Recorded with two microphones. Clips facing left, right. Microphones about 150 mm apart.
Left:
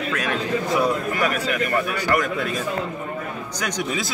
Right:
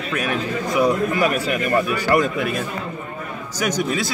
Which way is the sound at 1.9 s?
25° right (ahead or behind).